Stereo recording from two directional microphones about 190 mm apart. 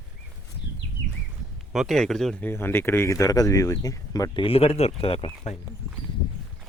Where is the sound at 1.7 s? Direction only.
Centre (ahead or behind); by 5.6 s 30° left (ahead or behind).